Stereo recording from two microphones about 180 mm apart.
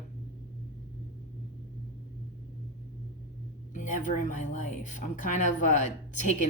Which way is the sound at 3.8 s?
45° left (ahead or behind).